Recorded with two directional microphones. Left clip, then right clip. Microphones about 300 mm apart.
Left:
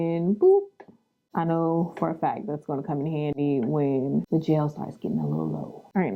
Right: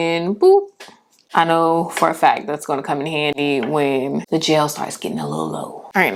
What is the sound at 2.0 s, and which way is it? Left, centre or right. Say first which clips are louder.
Speech: right 12 dB; centre.